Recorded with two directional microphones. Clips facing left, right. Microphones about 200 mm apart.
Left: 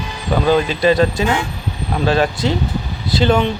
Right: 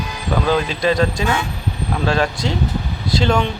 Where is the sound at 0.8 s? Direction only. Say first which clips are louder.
Left 3 dB; 5° left (ahead or behind).